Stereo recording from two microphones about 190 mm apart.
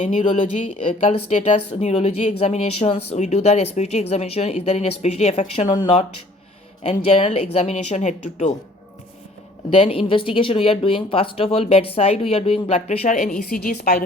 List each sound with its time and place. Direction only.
0.0 s speech: 40° left (ahead or behind)
9.6 s speech: 30° left (ahead or behind)
13.2 s a woman's voice: 50° left (ahead or behind)